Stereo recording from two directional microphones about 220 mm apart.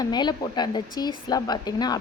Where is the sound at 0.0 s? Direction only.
20° left (ahead or behind).